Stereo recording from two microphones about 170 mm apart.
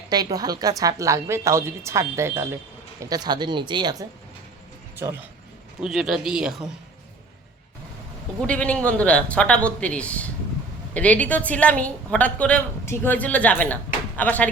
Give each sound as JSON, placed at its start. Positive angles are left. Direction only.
{"t": 0.1, "sound": "a woman's voice", "side_deg": -20}
{"t": 5.8, "sound": "speech", "side_deg": 0}
{"t": 8.4, "sound": "a woman's voice", "side_deg": 5}